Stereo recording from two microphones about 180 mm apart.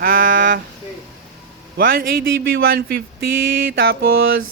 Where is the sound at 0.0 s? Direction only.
50° right (ahead or behind).